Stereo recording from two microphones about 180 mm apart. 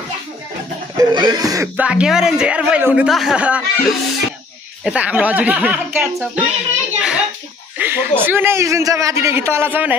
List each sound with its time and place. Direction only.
0.9 s speech: 25° right (ahead or behind)
1.8 s speech: 5° right (ahead or behind)
7.0 s a sound: 5° right (ahead or behind)
7.7 s snake: 10° right (ahead or behind)
8.2 s speech: 10° right (ahead or behind)